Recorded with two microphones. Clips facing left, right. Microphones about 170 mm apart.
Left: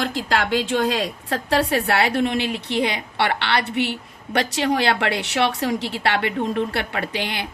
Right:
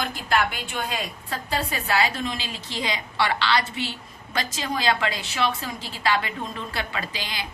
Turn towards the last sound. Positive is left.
turn(degrees=65)  # may be behind; listen again after turning